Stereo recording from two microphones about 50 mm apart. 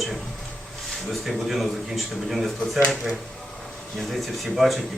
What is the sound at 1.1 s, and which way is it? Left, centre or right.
Speech, centre.